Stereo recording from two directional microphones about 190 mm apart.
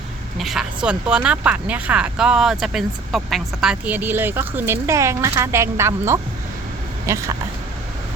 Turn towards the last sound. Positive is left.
turn(degrees=-15)  # may be behind; listen again after turning